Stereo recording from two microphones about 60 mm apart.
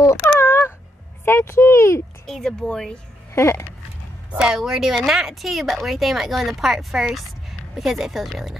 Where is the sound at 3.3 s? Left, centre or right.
Left.